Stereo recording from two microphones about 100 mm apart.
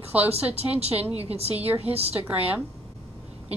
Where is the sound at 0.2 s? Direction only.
90° right.